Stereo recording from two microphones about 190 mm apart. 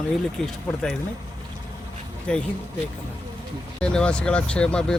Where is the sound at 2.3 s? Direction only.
5° left (ahead or behind).